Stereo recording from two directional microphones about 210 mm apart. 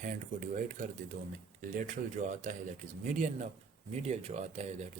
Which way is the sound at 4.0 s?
30° right (ahead or behind).